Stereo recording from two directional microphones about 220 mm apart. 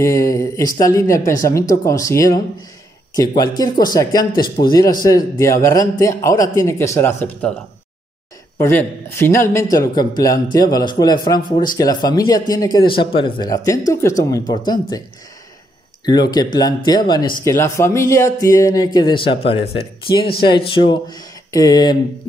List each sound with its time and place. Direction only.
0.0 s a man's voice: 15° left (ahead or behind)
8.5 s a man's voice: 10° left (ahead or behind)
16.1 s a man's voice: 20° left (ahead or behind)